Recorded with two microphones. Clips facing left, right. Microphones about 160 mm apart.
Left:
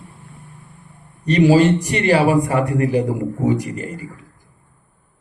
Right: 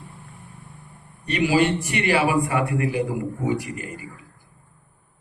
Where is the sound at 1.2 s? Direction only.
40° left (ahead or behind).